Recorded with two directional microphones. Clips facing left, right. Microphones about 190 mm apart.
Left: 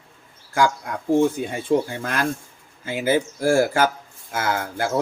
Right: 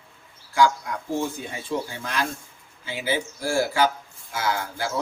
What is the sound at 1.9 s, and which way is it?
A man's voice, 50° left (ahead or behind).